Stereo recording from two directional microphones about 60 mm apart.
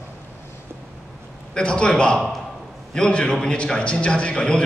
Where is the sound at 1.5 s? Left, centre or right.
Centre.